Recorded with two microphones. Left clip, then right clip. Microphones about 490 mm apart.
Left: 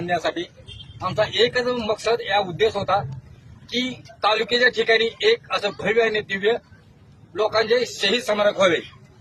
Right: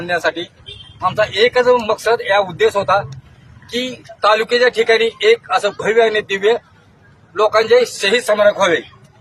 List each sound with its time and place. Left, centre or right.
0.1 s a man's voice: left